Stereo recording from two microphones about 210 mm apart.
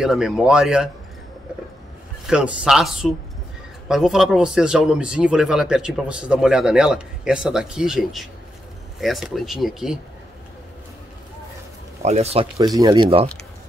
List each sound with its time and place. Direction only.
0.0 s speech: centre (ahead or behind)
2.2 s speech: 5° right (ahead or behind)
12.0 s speech: 30° right (ahead or behind)
12.5 s speech: 20° right (ahead or behind)